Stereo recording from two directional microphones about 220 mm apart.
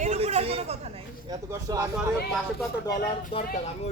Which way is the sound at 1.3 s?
15° right (ahead or behind).